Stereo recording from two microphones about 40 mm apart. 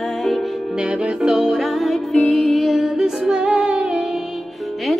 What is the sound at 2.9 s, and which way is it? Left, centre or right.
Music, centre.